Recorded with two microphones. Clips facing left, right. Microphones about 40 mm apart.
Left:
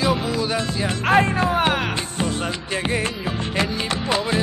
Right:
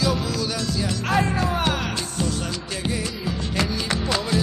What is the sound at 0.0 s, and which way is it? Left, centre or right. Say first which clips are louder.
Music: left 3 dB; left.